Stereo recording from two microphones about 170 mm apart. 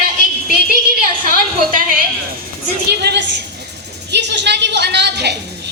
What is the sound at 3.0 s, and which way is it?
A woman's voice, 80° right.